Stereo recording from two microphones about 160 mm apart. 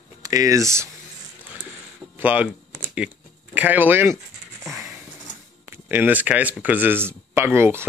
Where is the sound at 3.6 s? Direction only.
10° right (ahead or behind).